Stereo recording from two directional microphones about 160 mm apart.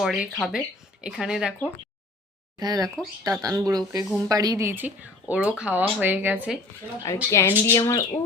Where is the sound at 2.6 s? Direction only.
25° right (ahead or behind).